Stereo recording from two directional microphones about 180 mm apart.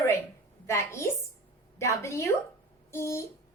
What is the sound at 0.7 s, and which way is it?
A woman's voice, 15° left (ahead or behind).